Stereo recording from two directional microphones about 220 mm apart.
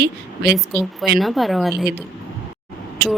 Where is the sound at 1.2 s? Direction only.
Centre (ahead or behind).